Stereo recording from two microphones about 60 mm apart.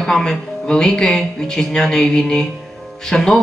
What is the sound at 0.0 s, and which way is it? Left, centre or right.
A woman's voice, centre.